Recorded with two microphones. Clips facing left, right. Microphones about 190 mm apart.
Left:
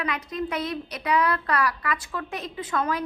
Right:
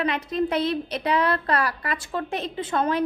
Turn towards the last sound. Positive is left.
turn(degrees=-30)  # may be behind; listen again after turning